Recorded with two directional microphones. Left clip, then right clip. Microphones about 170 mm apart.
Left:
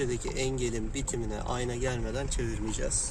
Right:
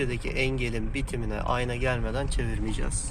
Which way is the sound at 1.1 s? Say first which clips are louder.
Right 6 dB; 10° right (ahead or behind).